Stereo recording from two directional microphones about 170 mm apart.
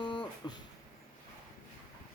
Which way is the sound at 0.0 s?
25° left (ahead or behind).